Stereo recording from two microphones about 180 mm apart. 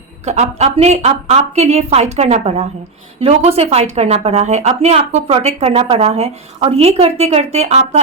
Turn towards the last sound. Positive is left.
turn(degrees=-40)  # may be behind; listen again after turning